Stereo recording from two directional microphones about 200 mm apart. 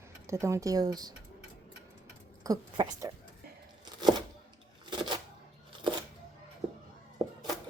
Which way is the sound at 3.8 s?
20° right (ahead or behind).